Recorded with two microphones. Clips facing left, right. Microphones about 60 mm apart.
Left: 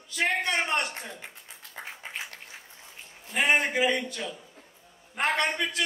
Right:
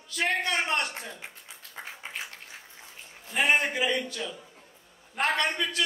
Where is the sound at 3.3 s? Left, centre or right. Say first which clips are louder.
Even; centre.